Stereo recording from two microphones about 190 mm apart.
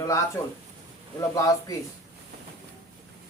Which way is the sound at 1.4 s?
20° left (ahead or behind).